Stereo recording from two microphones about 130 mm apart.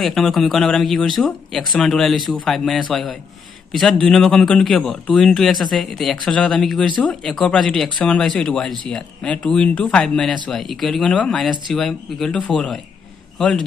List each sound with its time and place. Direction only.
0.0 s speech: 5° left (ahead or behind)